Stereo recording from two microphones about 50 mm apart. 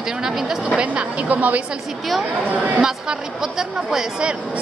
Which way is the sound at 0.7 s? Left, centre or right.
Right.